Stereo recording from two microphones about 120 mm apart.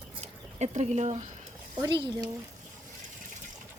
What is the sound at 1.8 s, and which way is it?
Speech, 35° right (ahead or behind).